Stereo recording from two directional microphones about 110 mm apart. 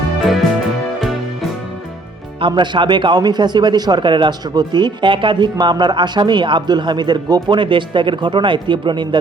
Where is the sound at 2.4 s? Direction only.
45° right (ahead or behind).